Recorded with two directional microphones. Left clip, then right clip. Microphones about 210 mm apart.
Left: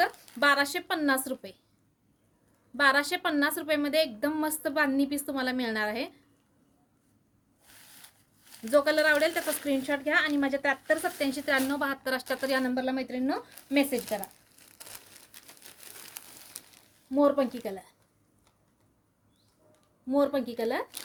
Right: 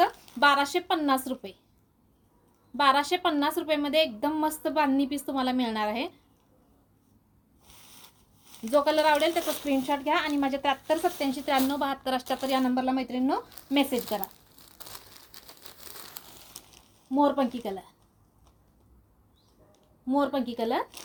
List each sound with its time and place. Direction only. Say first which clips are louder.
0.0 s speech: right 3 dB; 15° left (ahead or behind)
2.7 s a woman's voice: right 1 dB; 15° left (ahead or behind)
8.6 s a woman's voice: right 1 dB; 15° left (ahead or behind)
10.0 s a woman's voice: even; 35° right (ahead or behind)
10.2 s a woman's voice: right 1 dB; 20° left (ahead or behind)
14.8 s crumpling: right 3 dB; 10° right (ahead or behind)
16.2 s crumpling: right 1 dB; centre (ahead or behind)
17.1 s a woman's voice: even; 15° left (ahead or behind)
20.1 s a woman's voice: even; 15° left (ahead or behind)